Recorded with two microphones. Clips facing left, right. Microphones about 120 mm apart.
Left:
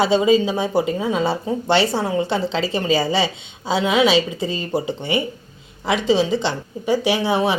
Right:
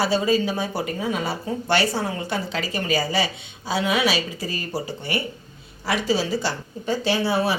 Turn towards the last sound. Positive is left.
turn(degrees=20)  # may be behind; listen again after turning